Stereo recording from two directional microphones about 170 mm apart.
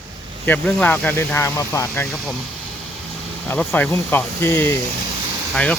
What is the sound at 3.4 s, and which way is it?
Speech, 10° left (ahead or behind).